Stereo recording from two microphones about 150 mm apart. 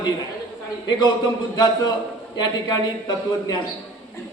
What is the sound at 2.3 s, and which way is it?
Speech, 25° left (ahead or behind).